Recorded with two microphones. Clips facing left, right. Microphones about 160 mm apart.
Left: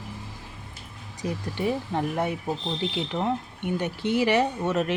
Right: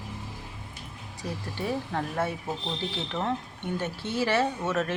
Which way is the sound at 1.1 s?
20° left (ahead or behind).